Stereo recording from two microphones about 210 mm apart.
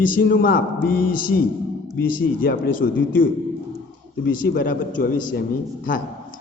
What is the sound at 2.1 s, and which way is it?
Speech, 40° left (ahead or behind).